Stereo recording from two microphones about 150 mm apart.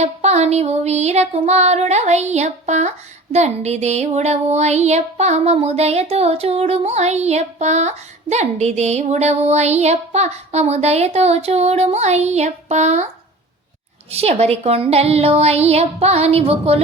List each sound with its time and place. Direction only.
0.0 s child singing: 45° right (ahead or behind)
14.1 s child singing: 45° right (ahead or behind)